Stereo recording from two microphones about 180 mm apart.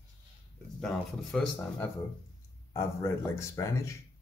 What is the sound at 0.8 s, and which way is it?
Speech, 5° left (ahead or behind).